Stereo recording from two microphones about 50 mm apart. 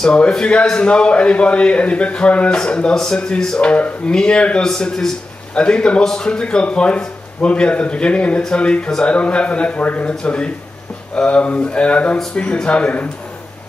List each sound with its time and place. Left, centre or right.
0.0 s a man's voice: centre